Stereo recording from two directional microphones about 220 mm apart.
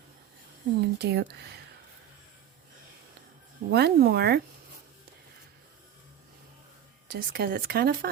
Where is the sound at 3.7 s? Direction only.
45° right (ahead or behind).